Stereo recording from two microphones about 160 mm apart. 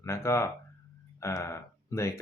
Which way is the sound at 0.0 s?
15° left (ahead or behind).